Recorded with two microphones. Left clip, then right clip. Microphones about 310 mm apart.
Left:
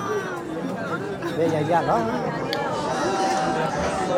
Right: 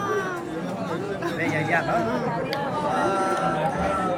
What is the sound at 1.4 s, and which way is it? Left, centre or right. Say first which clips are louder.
Speech: left 4 dB; centre.